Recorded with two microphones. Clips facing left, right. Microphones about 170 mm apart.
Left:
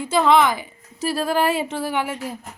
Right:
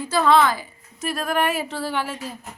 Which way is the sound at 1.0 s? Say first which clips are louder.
Left 3 dB; 30° left (ahead or behind).